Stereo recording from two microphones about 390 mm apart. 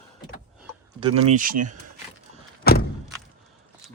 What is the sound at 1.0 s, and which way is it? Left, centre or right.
Speech, centre.